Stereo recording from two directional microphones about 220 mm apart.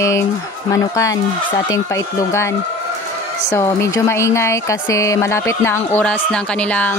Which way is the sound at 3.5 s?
10° left (ahead or behind).